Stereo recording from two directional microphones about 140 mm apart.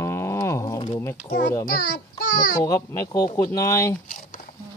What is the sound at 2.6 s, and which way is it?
Speech, 25° left (ahead or behind).